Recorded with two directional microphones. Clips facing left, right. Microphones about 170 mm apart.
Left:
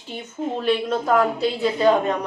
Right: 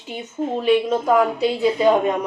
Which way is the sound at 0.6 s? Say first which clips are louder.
Right 4 dB; 10° right (ahead or behind).